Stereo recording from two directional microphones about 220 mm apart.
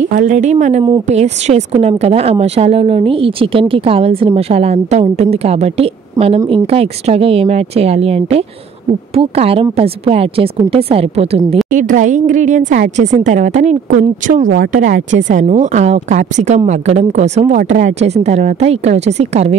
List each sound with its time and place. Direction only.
0.1 s a woman's voice: 35° right (ahead or behind)